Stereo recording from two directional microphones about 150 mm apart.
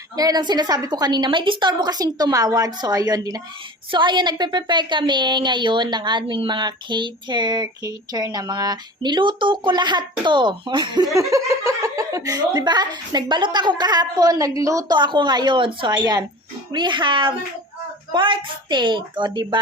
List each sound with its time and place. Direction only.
0.2 s a woman's voice: 25° right (ahead or behind)